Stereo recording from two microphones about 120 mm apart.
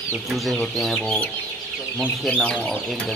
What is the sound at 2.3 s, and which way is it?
Speech, 10° left (ahead or behind).